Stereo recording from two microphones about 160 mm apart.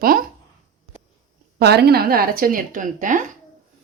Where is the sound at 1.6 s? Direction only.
90° right; by 3.2 s 55° right (ahead or behind).